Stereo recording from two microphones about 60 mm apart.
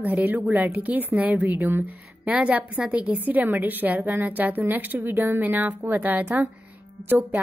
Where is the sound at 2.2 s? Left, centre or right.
Right.